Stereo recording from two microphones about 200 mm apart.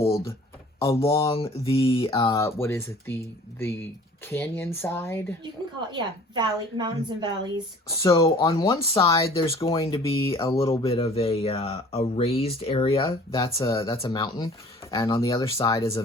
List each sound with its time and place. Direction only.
0.8 s speech: 15° left (ahead or behind)
1.3 s speech: 30° left (ahead or behind); by 5.2 s 10° left (ahead or behind)
5.9 s a woman's voice: 20° right (ahead or behind)
7.9 s speech: 15° left (ahead or behind)
9.3 s speech: 25° left (ahead or behind)
10.5 s speech: 15° left (ahead or behind)
10.8 s speech: 30° left (ahead or behind)
13.1 s speech: 15° left (ahead or behind)